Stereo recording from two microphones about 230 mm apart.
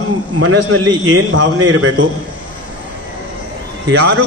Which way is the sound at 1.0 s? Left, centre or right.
Right.